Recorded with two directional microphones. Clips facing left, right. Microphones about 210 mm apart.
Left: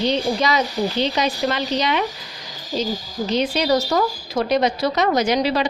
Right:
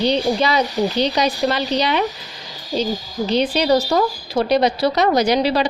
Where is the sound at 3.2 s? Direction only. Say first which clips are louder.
Right 3 dB; 30° right (ahead or behind).